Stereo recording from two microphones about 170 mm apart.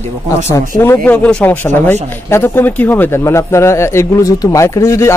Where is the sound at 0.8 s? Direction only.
10° left (ahead or behind).